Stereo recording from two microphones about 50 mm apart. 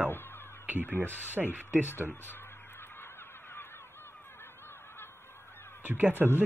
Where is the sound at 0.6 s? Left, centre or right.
Right.